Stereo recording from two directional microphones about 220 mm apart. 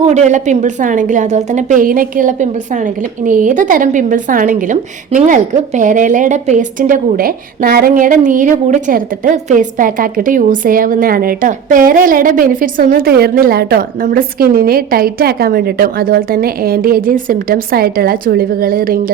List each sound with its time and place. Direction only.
0.0 s a woman's voice: 30° right (ahead or behind)